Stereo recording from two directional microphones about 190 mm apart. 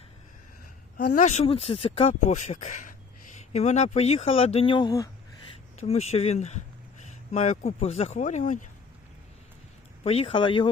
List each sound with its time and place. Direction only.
1.0 s speech: 40° left (ahead or behind); by 5.0 s 20° left (ahead or behind)
5.7 s speech: 35° left (ahead or behind)
10.0 s speech: 30° left (ahead or behind)